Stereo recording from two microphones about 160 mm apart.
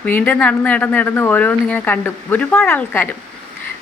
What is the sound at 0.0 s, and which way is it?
Speech, 10° left (ahead or behind).